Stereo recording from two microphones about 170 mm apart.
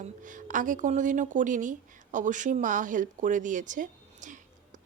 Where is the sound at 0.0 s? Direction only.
50° right (ahead or behind).